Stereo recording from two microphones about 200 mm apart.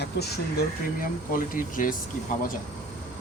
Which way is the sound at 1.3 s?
40° left (ahead or behind).